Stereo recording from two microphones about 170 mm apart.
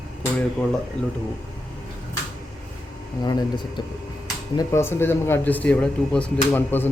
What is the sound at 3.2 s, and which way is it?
Speech, 25° left (ahead or behind).